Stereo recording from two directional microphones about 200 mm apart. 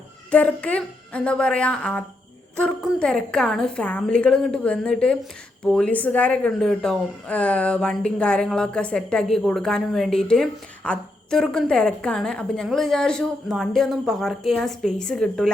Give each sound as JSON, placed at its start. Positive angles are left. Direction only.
{"t": 0.3, "sound": "speech", "side_deg": 5}